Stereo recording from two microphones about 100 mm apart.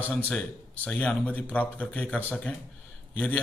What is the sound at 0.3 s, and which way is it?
A man's voice, 10° left (ahead or behind).